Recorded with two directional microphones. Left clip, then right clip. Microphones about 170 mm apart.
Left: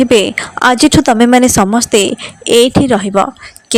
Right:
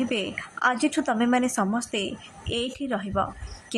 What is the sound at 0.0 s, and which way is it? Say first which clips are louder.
A woman's voice: left 19 dB; 50° left (ahead or behind).